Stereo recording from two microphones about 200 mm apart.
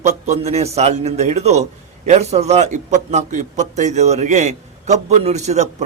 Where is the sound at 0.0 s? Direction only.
35° right (ahead or behind).